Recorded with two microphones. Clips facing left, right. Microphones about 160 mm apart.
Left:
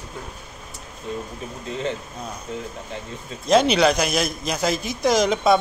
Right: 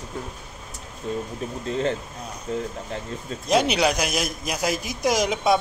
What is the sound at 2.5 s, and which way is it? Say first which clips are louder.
Speech: right 5 dB; 40° right (ahead or behind).